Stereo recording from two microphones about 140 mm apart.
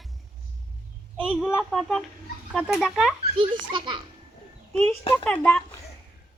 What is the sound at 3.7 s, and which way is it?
Speech, 35° right (ahead or behind).